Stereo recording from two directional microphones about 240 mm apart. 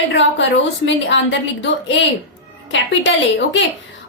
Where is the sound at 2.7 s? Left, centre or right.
Left.